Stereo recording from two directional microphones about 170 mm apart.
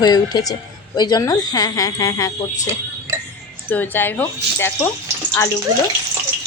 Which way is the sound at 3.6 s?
10° left (ahead or behind).